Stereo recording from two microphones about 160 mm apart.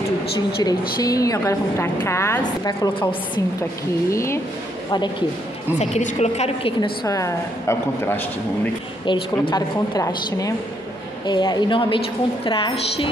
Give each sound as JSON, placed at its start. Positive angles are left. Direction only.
{"t": 0.7, "sound": "a woman's voice", "side_deg": 20}
{"t": 4.1, "sound": "speech", "side_deg": 15}
{"t": 5.8, "sound": "a woman's voice", "side_deg": 45}
{"t": 6.8, "sound": "a woman's voice", "side_deg": 20}
{"t": 9.0, "sound": "a woman's voice", "side_deg": 30}
{"t": 11.2, "sound": "a woman's voice", "side_deg": 25}